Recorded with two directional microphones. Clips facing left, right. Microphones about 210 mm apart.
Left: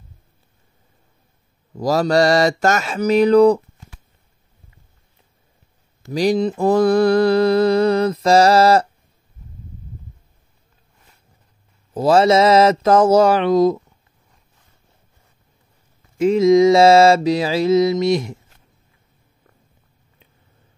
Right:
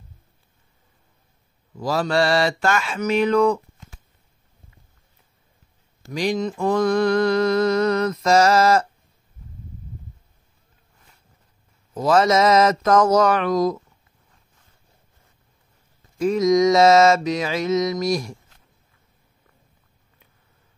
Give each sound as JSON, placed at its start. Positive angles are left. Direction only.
{"t": 1.8, "sound": "mantra", "side_deg": 40}
{"t": 6.0, "sound": "mantra", "side_deg": 35}
{"t": 11.9, "sound": "mantra", "side_deg": 30}
{"t": 16.2, "sound": "mantra", "side_deg": 25}